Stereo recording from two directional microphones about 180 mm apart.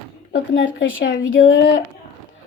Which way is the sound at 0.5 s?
90° left.